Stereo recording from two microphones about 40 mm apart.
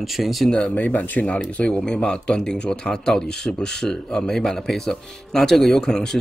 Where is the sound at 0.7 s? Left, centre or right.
Left.